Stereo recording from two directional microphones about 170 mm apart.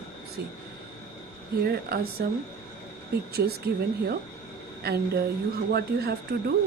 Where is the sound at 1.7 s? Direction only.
65° right (ahead or behind).